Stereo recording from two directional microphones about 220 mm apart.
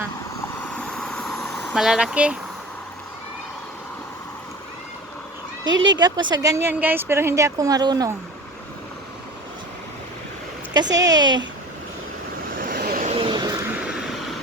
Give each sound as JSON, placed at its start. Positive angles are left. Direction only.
{"t": 0.6, "sound": "vehicle", "side_deg": 5}
{"t": 5.8, "sound": "speech", "side_deg": -20}
{"t": 10.8, "sound": "speech", "side_deg": -15}
{"t": 12.5, "sound": "vehicle", "side_deg": -40}
{"t": 13.1, "sound": "vehicle", "side_deg": -20}